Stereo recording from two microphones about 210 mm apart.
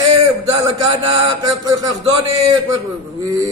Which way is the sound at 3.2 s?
15° right (ahead or behind).